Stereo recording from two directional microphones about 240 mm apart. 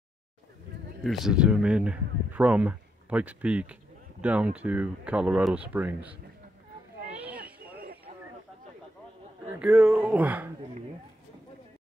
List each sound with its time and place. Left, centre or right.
1.0 s speech: centre
7.2 s a sound: centre
9.6 s speech: centre